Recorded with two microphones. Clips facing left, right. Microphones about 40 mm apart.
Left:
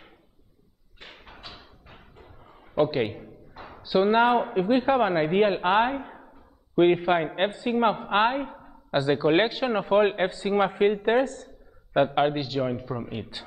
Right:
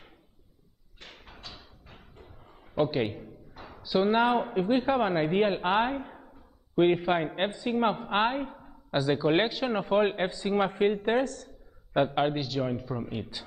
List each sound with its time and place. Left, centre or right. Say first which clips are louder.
1.0 s bouncing: left 3 dB; centre
2.7 s a man's voice: left 3 dB; centre